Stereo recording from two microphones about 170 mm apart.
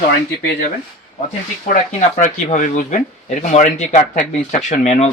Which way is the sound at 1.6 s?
50° left (ahead or behind).